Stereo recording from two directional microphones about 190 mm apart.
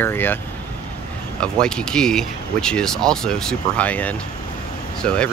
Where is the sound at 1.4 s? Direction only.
5° left (ahead or behind).